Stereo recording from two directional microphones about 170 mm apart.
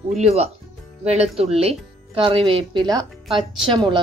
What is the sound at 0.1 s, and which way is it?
A woman's voice, 40° right (ahead or behind).